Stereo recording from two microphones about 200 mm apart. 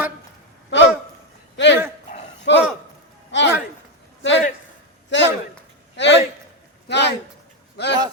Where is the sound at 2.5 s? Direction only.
65° left (ahead or behind).